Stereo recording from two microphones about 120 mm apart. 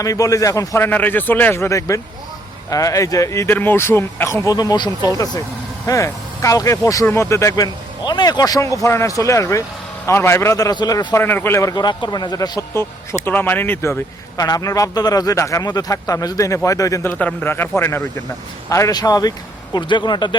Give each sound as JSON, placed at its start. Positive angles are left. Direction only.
{"t": 0.0, "sound": "speech", "side_deg": 30}
{"t": 0.9, "sound": "speech", "side_deg": 15}
{"t": 11.2, "sound": "speech", "side_deg": 15}
{"t": 11.7, "sound": "speech", "side_deg": 35}
{"t": 14.3, "sound": "speech", "side_deg": 30}
{"t": 18.7, "sound": "speech", "side_deg": 30}